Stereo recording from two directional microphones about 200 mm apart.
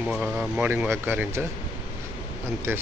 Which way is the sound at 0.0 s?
Centre (ahead or behind).